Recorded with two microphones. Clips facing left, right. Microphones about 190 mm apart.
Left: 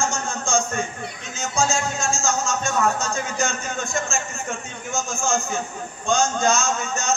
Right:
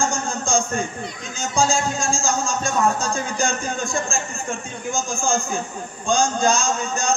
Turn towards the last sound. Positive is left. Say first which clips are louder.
# right 2 dB
turn(degrees=-35)  # may be behind; listen again after turning